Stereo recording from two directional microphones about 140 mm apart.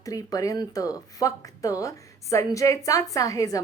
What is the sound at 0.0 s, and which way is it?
Speech, 25° left (ahead or behind).